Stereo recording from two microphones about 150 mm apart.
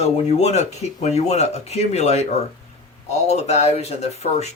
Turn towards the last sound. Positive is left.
turn(degrees=45)  # may be behind; listen again after turning